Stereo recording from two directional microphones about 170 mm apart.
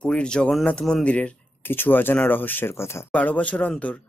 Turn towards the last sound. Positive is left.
turn(degrees=10)  # may be behind; listen again after turning